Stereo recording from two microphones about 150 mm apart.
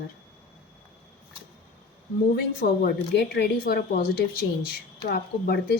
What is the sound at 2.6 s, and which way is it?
Speech, 65° left (ahead or behind).